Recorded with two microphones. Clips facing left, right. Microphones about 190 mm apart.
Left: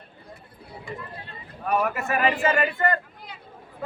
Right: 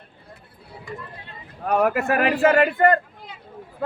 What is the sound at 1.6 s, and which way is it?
Speech, 75° right (ahead or behind).